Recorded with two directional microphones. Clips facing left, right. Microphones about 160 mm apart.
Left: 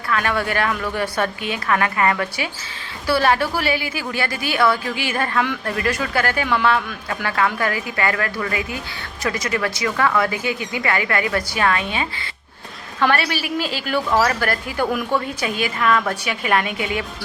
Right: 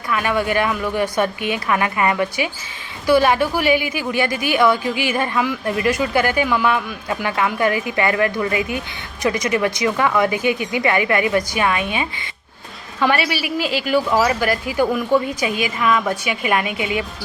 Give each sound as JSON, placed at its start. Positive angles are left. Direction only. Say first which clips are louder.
{"t": 0.1, "sound": "a woman's voice", "louder": "right 2 dB", "side_deg": -10}
{"t": 13.6, "sound": "speech", "louder": "right 3 dB", "side_deg": 40}
{"t": 13.8, "sound": "speech", "louder": "right 2 dB", "side_deg": -10}
{"t": 16.7, "sound": "a woman's voice", "louder": "right 2 dB", "side_deg": 45}